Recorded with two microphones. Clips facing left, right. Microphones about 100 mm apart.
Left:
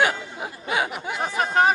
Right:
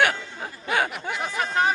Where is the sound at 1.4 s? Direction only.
25° left (ahead or behind).